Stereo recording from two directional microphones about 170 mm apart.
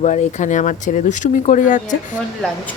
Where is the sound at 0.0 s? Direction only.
45° left (ahead or behind).